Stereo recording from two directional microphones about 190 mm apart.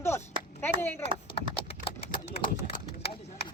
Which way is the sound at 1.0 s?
30° left (ahead or behind).